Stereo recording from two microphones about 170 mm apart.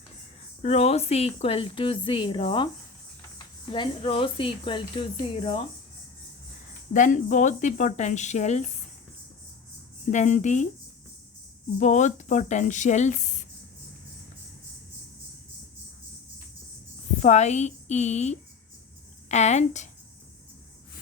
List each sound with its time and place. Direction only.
0.6 s a woman's voice: 40° left (ahead or behind)
6.9 s speech: 50° left (ahead or behind)
10.1 s speech: 45° left (ahead or behind)
11.8 s speech: 45° left (ahead or behind)
17.2 s a woman's voice: 40° left (ahead or behind)